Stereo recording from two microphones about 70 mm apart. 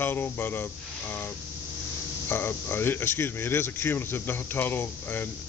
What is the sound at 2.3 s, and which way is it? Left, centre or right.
Speech, left.